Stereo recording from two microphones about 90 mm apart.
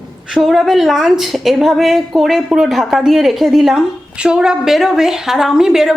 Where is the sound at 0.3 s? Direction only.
5° right (ahead or behind).